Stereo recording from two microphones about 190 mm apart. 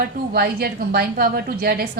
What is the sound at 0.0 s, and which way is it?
A woman's voice, 50° right (ahead or behind).